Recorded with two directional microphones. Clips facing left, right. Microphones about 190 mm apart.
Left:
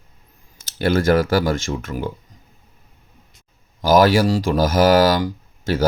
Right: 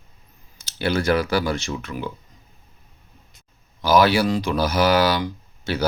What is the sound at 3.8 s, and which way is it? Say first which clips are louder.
Speech: left 3 dB; 45° left (ahead or behind).